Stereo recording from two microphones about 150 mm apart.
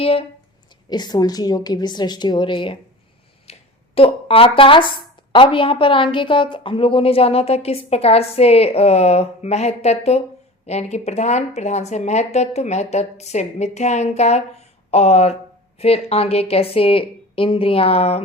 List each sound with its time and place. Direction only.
0.0 s speech: 40° left (ahead or behind)
0.9 s a woman's voice: 25° left (ahead or behind)
3.5 s a sound: 45° left (ahead or behind)
3.9 s a woman's voice: 40° left (ahead or behind)